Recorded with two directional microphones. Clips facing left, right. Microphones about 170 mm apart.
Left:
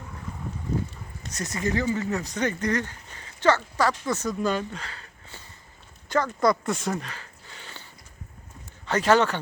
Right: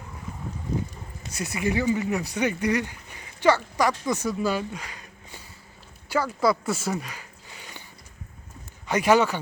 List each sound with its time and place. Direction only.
1.2 s speech: 10° right (ahead or behind)
8.9 s speech: 10° right (ahead or behind)